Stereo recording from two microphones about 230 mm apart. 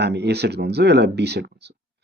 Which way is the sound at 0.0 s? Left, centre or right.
Right.